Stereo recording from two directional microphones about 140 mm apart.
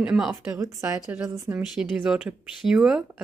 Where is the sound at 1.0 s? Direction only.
10° right (ahead or behind).